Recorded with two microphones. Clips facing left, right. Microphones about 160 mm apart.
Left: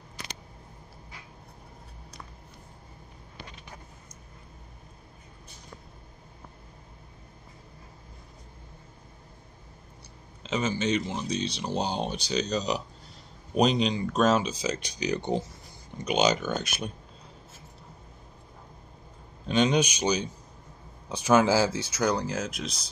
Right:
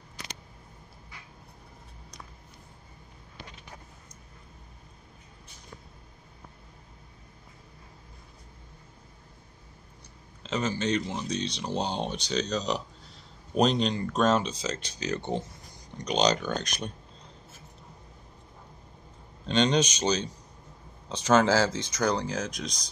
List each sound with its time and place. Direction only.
10.4 s speech: 5° left (ahead or behind)
19.4 s speech: 10° left (ahead or behind)